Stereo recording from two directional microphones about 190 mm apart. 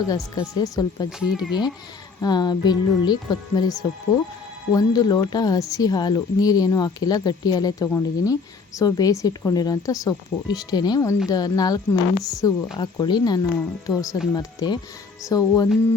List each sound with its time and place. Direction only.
0.1 s speech: 20° left (ahead or behind)
1.2 s speech: 5° right (ahead or behind)
2.2 s speech: 20° left (ahead or behind)